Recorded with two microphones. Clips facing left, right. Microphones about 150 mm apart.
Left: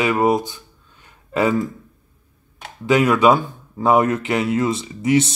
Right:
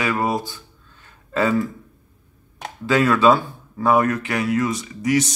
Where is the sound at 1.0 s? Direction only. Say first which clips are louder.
Left 2 dB; 15° left (ahead or behind).